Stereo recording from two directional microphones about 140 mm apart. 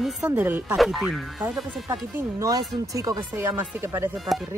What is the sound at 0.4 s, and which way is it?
Speech, 15° right (ahead or behind).